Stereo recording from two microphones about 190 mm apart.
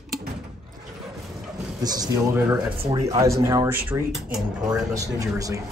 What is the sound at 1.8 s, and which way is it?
Speech, 20° right (ahead or behind).